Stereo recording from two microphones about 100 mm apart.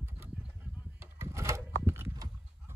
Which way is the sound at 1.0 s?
25° right (ahead or behind).